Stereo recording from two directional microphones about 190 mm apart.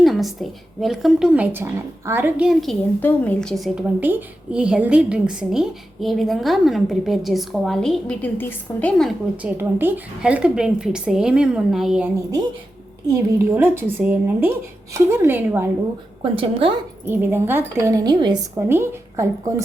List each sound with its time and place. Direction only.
0.0 s a woman's voice: centre (ahead or behind)
9.6 s a woman's voice: 10° right (ahead or behind)
13.4 s speech: 10° right (ahead or behind)
16.2 s speech: 30° right (ahead or behind)
17.1 s speech: 10° right (ahead or behind)